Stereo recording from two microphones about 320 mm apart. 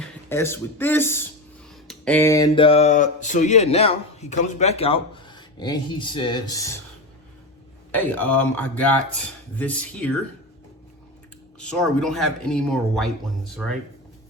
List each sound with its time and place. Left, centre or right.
0.0 s speech: centre
7.9 s speech: centre
11.6 s speech: centre